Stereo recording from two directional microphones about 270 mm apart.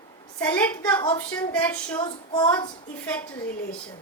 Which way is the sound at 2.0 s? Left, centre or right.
Centre.